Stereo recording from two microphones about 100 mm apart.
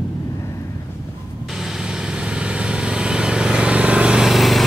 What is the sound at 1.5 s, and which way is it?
Vehicle, 5° right (ahead or behind).